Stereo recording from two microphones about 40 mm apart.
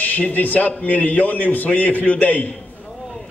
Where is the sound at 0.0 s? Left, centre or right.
Left.